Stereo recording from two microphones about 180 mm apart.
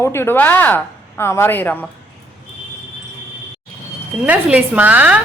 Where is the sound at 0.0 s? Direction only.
15° left (ahead or behind).